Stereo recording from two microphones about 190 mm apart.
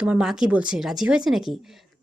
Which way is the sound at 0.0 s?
5° right (ahead or behind).